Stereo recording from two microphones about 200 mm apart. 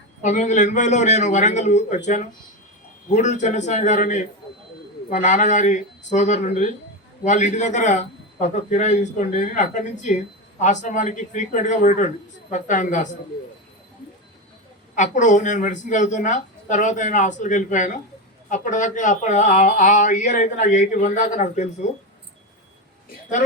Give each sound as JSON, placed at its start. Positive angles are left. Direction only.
{"t": 0.2, "sound": "speech", "side_deg": 40}
{"t": 14.9, "sound": "speech", "side_deg": 40}